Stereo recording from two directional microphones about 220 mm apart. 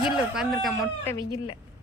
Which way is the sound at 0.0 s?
Centre (ahead or behind).